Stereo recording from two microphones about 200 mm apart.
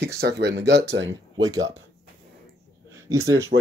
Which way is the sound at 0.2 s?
60° right (ahead or behind).